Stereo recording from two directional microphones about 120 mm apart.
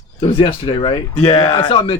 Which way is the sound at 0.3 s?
45° left (ahead or behind).